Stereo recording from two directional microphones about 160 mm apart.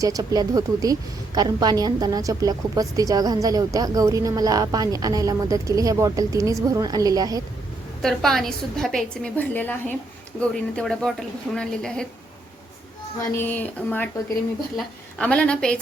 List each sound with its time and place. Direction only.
0.0 s a woman's voice: 20° right (ahead or behind)
8.0 s a woman's voice: centre (ahead or behind)
13.3 s speech: 10° left (ahead or behind)
15.2 s speech: 5° left (ahead or behind)